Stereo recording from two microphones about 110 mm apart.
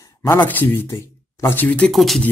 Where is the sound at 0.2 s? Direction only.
15° left (ahead or behind).